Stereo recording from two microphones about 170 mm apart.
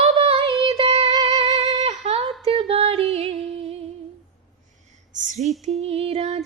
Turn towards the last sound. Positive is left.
turn(degrees=-40)  # may be behind; listen again after turning